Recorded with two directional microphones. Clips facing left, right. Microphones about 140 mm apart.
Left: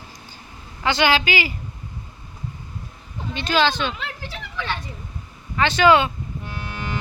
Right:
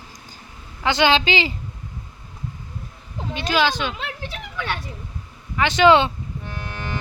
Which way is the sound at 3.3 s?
10° right (ahead or behind).